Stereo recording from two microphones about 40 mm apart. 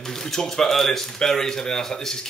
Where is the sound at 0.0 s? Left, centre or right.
Centre.